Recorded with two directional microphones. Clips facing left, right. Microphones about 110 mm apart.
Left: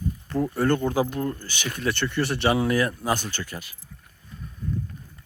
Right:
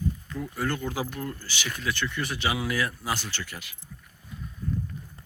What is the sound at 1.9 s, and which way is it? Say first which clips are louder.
Speech: left 6 dB; 30° left (ahead or behind).